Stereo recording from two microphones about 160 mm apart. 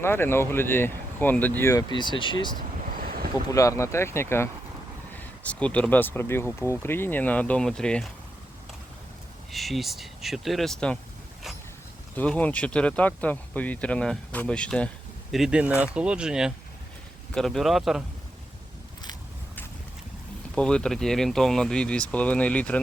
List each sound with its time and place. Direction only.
0.0 s speech: 15° left (ahead or behind)
1.9 s speech: 30° left (ahead or behind)
3.0 s boat: 60° right (ahead or behind)
3.5 s speech: 20° left (ahead or behind)
9.5 s speech: centre (ahead or behind)
12.1 s speech: 10° left (ahead or behind)
20.6 s speech: 5° left (ahead or behind)